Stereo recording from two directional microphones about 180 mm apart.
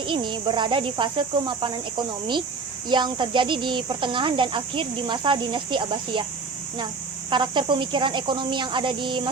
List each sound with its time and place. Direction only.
0.0 s speech: 25° right (ahead or behind)
7.3 s speech: 25° right (ahead or behind)